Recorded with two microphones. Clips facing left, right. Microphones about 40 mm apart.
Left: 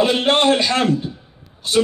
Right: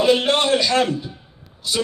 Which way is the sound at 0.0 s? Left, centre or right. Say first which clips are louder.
Left 1 dB; left.